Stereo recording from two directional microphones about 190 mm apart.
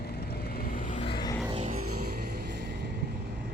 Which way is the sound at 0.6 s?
45° left (ahead or behind).